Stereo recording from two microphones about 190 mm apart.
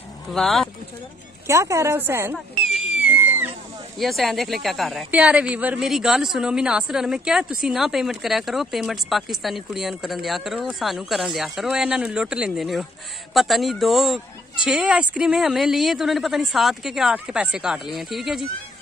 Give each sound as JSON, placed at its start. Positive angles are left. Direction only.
{"t": 0.3, "sound": "a woman's voice", "side_deg": 0}
{"t": 1.5, "sound": "a woman's voice", "side_deg": -15}
{"t": 2.3, "sound": "a sound", "side_deg": 0}
{"t": 4.0, "sound": "a woman's voice", "side_deg": 0}